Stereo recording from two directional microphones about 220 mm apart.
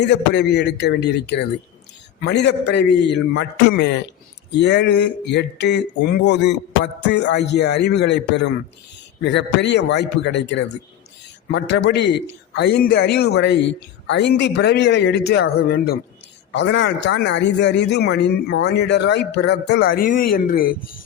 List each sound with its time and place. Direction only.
0.0 s a man's voice: 50° left (ahead or behind)